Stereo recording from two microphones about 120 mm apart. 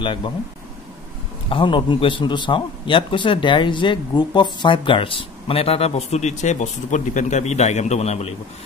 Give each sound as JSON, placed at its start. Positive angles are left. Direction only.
{"t": 0.0, "sound": "speech", "side_deg": 40}
{"t": 1.5, "sound": "a man's voice", "side_deg": 45}